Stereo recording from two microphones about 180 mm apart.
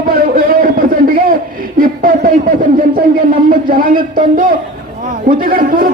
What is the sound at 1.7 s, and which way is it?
Speech, 50° right (ahead or behind).